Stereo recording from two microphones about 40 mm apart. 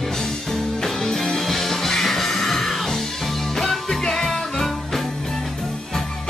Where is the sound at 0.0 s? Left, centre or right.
Centre.